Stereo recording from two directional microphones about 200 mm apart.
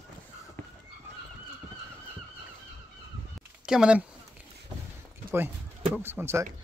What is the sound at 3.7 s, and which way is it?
Speech, 5° right (ahead or behind).